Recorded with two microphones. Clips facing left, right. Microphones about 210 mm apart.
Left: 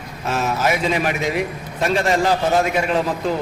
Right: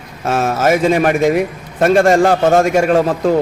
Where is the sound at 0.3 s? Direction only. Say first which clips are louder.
Right 6 dB; 50° right (ahead or behind).